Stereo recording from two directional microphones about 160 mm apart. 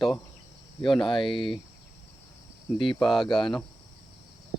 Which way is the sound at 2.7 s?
35° left (ahead or behind).